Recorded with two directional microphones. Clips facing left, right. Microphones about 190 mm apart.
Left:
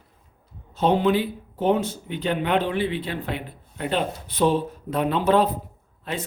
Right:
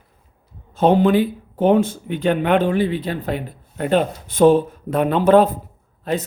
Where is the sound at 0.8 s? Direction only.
50° right (ahead or behind).